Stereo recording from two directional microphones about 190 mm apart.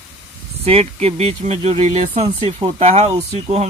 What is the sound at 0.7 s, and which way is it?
Speech, 30° right (ahead or behind).